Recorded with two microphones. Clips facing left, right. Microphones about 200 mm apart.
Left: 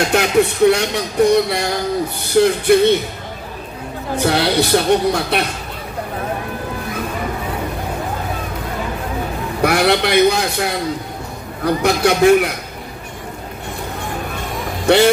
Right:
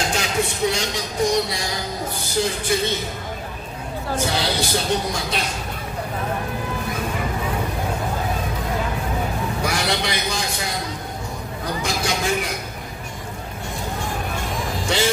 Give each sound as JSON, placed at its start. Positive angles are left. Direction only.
{"t": 0.1, "sound": "speech", "side_deg": 60}
{"t": 4.2, "sound": "speech", "side_deg": 60}
{"t": 9.6, "sound": "speech", "side_deg": 60}
{"t": 14.9, "sound": "speech", "side_deg": 65}